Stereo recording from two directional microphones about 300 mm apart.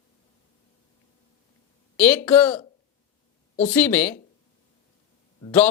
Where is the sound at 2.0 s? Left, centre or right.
Centre.